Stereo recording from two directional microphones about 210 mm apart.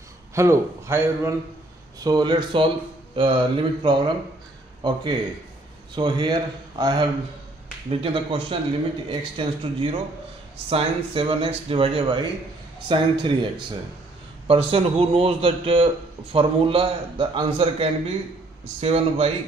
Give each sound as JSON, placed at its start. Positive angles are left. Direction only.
{"t": 0.3, "sound": "a man's voice", "side_deg": -15}
{"t": 14.5, "sound": "a man's voice", "side_deg": -25}